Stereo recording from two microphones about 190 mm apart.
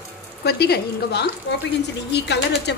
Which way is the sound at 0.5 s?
55° left (ahead or behind).